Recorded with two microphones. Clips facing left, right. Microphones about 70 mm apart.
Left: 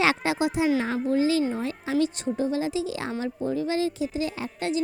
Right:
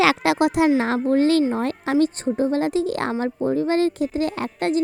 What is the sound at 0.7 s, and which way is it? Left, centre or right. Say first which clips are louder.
Speech: right 5 dB; right.